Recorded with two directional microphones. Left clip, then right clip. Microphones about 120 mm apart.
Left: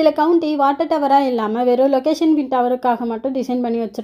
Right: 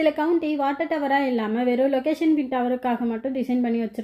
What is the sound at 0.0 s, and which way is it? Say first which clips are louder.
A woman's voice: left 7 dB; 30° left (ahead or behind).